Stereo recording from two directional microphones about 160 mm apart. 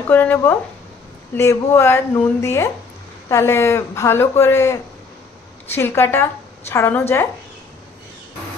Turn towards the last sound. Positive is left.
turn(degrees=15)  # may be behind; listen again after turning